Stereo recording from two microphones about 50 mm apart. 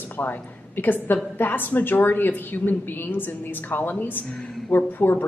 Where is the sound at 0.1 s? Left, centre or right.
Left.